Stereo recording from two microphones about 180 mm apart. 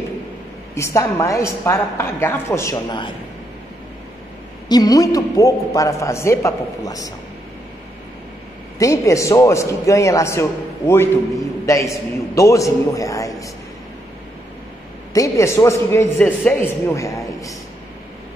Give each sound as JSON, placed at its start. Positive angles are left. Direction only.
{"t": 0.7, "sound": "a man's voice", "side_deg": 15}
{"t": 4.6, "sound": "a man's voice", "side_deg": 20}
{"t": 8.7, "sound": "a man's voice", "side_deg": 15}
{"t": 15.1, "sound": "a man's voice", "side_deg": 15}